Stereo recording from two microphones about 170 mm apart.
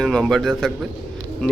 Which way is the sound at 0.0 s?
5° left (ahead or behind).